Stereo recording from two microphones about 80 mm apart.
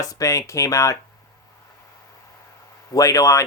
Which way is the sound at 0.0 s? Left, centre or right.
Left.